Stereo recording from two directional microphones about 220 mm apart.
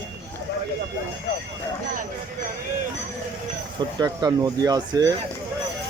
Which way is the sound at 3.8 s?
20° right (ahead or behind).